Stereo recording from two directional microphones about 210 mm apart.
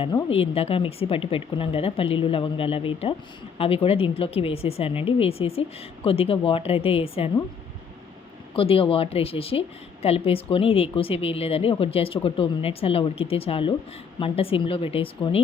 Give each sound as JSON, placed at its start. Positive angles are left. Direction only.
{"t": 0.0, "sound": "a woman's voice", "side_deg": 20}
{"t": 8.5, "sound": "a woman's voice", "side_deg": 25}